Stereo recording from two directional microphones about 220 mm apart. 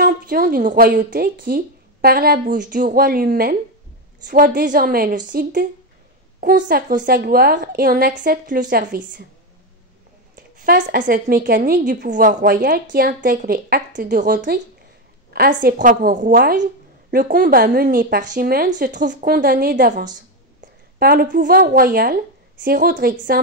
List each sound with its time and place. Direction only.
0.0 s a woman's voice: 40° right (ahead or behind)
10.3 s a woman's voice: 40° right (ahead or behind)